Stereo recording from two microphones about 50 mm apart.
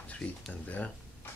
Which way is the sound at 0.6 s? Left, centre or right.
Left.